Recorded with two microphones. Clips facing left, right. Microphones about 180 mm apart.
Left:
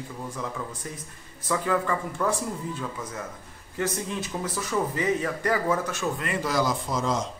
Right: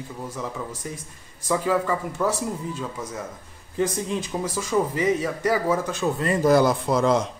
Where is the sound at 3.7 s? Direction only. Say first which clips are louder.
Right 4 dB; 15° right (ahead or behind).